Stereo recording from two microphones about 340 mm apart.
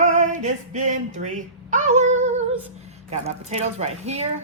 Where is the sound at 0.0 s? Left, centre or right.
Right.